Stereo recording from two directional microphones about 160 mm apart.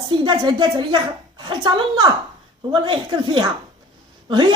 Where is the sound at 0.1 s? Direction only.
30° right (ahead or behind).